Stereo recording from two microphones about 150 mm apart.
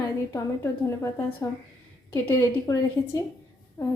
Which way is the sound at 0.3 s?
20° left (ahead or behind).